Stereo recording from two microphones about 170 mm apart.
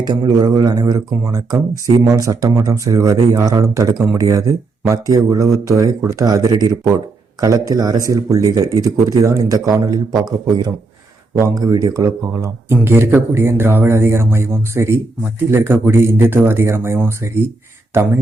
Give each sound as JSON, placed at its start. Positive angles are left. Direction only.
{"t": 0.0, "sound": "speech", "side_deg": -25}
{"t": 11.3, "sound": "speech", "side_deg": -20}